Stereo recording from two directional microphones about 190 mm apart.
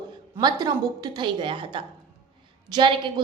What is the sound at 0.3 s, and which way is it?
A woman's voice, 20° right (ahead or behind).